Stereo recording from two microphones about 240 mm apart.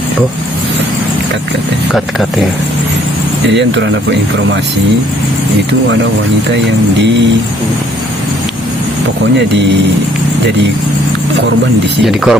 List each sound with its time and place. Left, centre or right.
3.5 s speech: right
12.0 s speech: centre